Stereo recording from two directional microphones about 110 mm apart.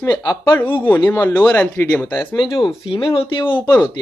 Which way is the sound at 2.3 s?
40° left (ahead or behind).